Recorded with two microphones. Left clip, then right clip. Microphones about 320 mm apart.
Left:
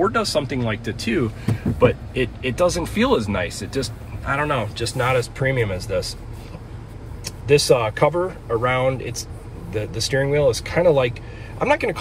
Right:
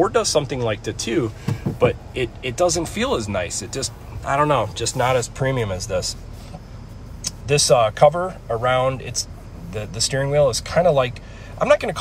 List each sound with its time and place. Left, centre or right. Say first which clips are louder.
0.0 s speech: right 2 dB; centre
7.4 s speech: even; centre